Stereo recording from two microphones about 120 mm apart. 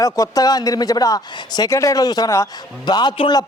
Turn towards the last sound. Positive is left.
turn(degrees=40)  # may be behind; listen again after turning